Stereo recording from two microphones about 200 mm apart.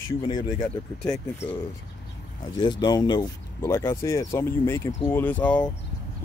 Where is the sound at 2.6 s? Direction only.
20° left (ahead or behind).